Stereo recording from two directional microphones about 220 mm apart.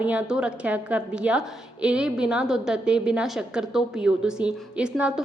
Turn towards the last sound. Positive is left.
turn(degrees=-5)  # may be behind; listen again after turning